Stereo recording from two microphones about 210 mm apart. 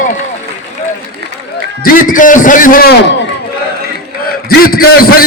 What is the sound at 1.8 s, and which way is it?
A man's voice, 40° left (ahead or behind).